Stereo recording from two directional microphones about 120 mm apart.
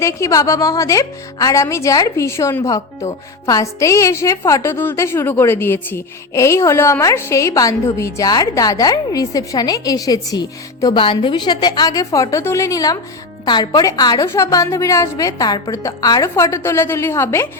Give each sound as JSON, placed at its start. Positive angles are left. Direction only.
{"t": 0.0, "sound": "a woman's voice", "side_deg": 25}
{"t": 11.0, "sound": "a woman's voice", "side_deg": 45}